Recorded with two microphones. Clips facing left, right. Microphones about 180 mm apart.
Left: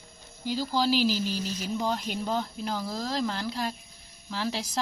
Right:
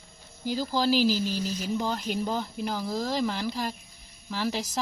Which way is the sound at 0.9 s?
45° right (ahead or behind).